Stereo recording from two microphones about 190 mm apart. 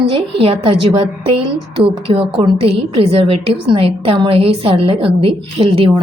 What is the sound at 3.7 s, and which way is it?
A woman's voice, 30° right (ahead or behind).